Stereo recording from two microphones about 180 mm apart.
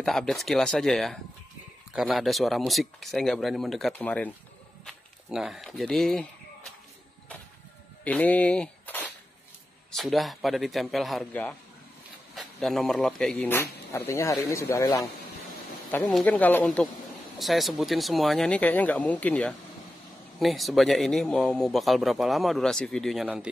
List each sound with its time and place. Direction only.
0.0 s speech: centre (ahead or behind)
8.0 s speech: 10° left (ahead or behind)
16.1 s speech: 5° left (ahead or behind)